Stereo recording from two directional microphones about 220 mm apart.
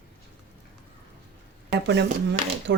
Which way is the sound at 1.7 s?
50° right (ahead or behind).